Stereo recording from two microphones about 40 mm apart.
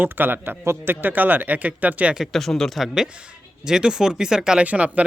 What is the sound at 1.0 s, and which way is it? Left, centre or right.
Speech, right.